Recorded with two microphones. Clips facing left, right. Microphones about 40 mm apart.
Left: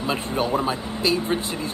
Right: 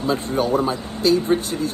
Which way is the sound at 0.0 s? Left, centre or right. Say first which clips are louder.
Right 3 dB; left.